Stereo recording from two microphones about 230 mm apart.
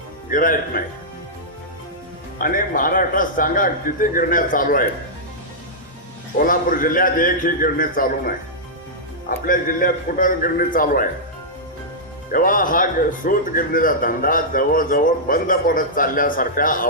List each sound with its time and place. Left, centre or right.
0.3 s a man's voice: left
2.4 s a man's voice: left
6.3 s a man's voice: left
9.5 s a man's voice: left
12.3 s a man's voice: left